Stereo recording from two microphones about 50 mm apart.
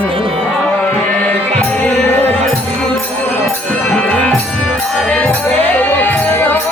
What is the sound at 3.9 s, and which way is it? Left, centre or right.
Music, left.